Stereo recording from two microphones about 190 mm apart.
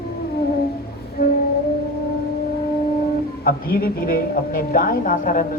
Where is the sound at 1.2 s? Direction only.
55° left (ahead or behind).